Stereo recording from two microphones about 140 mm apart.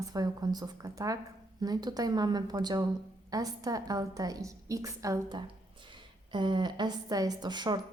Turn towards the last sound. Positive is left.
turn(degrees=-30)  # may be behind; listen again after turning